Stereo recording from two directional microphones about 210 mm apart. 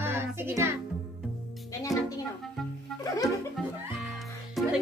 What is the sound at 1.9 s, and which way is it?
Music, centre (ahead or behind).